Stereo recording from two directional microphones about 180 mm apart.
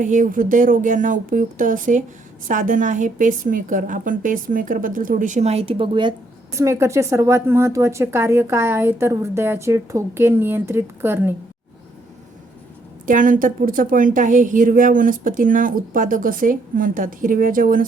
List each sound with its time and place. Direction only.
0.0 s a woman's voice: 45° right (ahead or behind); by 6.1 s 25° right (ahead or behind)
6.6 s speech: 15° right (ahead or behind)
13.1 s a woman's voice: 45° right (ahead or behind)